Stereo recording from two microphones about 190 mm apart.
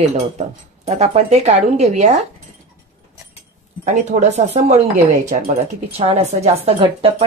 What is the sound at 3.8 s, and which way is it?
Speech, 40° right (ahead or behind).